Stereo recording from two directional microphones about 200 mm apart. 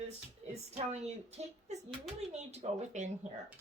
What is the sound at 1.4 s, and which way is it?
Speech, 35° right (ahead or behind).